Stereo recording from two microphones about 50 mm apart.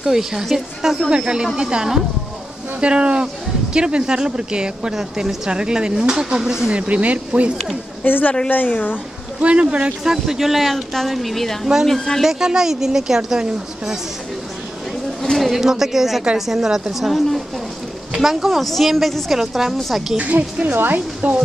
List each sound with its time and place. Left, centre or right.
0.0 s speech: centre
6.7 s speech: right
8.0 s speech: left
9.4 s speech: right
10.0 s a woman's voice: centre
12.2 s speech: centre
15.3 s a woman's voice: centre
18.1 s a woman's voice: centre
20.2 s speech: right